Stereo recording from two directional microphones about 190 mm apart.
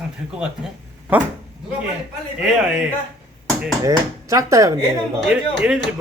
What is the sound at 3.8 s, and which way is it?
Speech, 15° right (ahead or behind).